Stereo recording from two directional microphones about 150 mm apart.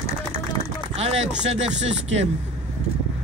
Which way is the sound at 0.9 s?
45° right (ahead or behind).